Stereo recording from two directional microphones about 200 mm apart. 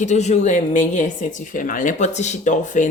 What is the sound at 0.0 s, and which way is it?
Speech, 35° left (ahead or behind).